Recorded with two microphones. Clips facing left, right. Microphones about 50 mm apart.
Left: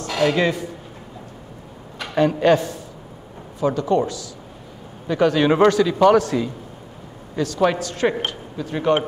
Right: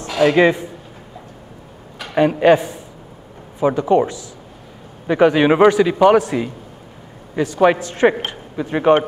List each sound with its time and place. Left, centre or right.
0.2 s a man's voice: right
2.1 s a man's voice: centre